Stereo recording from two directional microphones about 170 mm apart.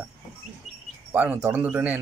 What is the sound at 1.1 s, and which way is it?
Speech, 10° right (ahead or behind).